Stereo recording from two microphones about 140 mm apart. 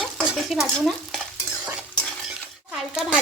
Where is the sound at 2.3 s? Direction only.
5° right (ahead or behind).